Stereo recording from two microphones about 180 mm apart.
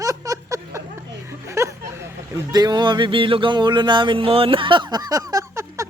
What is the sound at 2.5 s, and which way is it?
Music, 25° right (ahead or behind).